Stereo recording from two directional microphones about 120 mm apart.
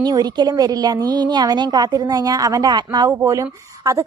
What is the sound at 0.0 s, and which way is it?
A woman's voice, 35° right (ahead or behind).